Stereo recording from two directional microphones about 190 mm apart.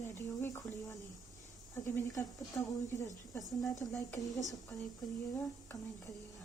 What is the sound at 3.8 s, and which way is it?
Speech, 20° left (ahead or behind).